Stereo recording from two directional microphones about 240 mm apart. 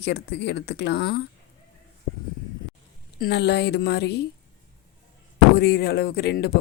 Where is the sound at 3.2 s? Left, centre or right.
Left.